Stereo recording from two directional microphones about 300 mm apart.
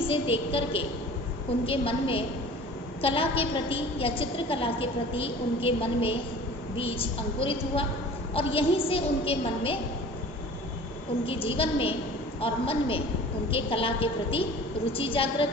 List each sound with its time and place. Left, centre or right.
0.1 s a woman's voice: centre
11.3 s a woman's voice: centre